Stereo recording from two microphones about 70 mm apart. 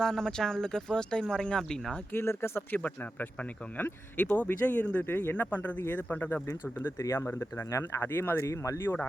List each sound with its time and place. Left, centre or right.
0.0 s speech: centre
2.1 s speech: left
7.0 s speech: left
7.3 s speech: left
7.7 s speech: left
8.0 s speech: left
8.4 s speech: left